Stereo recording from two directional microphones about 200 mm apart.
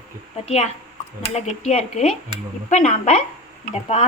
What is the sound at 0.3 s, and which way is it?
Speech, 30° left (ahead or behind).